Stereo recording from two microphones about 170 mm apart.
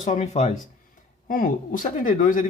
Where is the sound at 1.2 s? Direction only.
55° left (ahead or behind).